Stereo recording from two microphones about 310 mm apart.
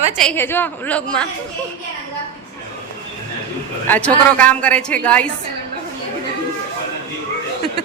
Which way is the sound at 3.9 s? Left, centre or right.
Centre.